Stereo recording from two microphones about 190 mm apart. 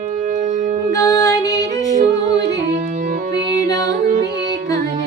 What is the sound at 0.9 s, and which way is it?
Female singing, 15° left (ahead or behind).